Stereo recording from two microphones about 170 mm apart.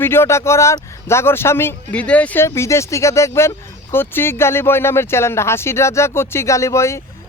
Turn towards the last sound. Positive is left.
turn(degrees=15)  # may be behind; listen again after turning